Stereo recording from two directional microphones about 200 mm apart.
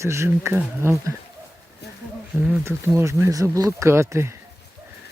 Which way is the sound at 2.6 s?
15° right (ahead or behind).